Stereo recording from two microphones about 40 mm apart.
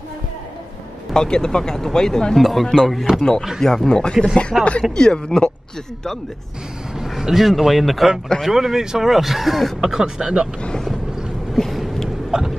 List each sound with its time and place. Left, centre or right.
1.1 s speech: centre
2.3 s speech: centre
3.2 s speech: centre
4.5 s speech: centre
4.9 s speech: centre
7.1 s speech: centre
9.8 s speech: centre
11.5 s a sound: centre
12.3 s a sound: centre